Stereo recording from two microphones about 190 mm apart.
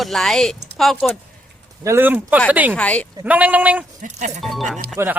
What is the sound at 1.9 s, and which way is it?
Speech, 10° right (ahead or behind).